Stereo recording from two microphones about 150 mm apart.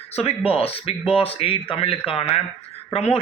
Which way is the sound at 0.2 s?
40° left (ahead or behind).